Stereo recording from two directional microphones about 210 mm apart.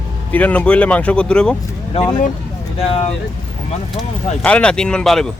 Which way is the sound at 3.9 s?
5° left (ahead or behind).